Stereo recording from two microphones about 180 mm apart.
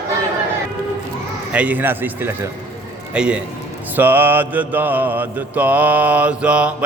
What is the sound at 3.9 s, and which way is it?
Mantra, 10° right (ahead or behind).